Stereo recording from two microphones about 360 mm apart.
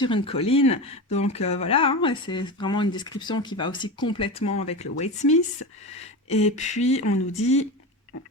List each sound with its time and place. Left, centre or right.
0.0 s speech: centre